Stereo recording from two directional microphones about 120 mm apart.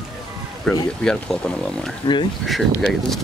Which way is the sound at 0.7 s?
5° left (ahead or behind).